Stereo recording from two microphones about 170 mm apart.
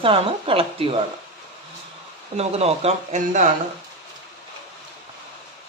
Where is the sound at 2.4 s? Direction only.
35° right (ahead or behind).